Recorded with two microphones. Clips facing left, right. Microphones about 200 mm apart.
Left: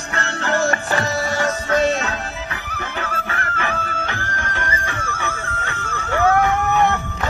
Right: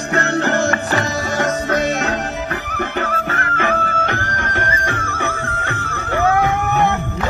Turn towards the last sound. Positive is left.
turn(degrees=-60)  # may be behind; listen again after turning